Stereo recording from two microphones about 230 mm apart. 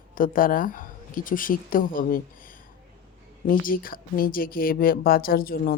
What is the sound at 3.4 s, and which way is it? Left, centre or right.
Speech, left.